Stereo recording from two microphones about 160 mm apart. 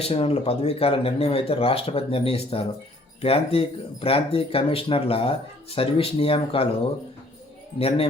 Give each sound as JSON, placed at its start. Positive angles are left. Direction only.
{"t": 0.0, "sound": "speech", "side_deg": 35}
{"t": 7.8, "sound": "speech", "side_deg": 35}